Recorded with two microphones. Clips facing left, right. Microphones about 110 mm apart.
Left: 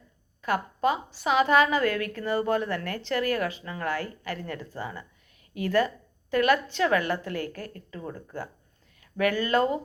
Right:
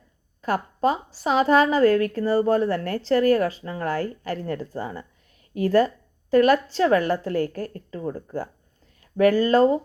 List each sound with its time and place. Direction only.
0.4 s a woman's voice: 40° right (ahead or behind)